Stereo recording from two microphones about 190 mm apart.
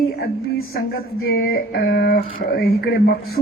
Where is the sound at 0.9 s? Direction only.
50° left (ahead or behind).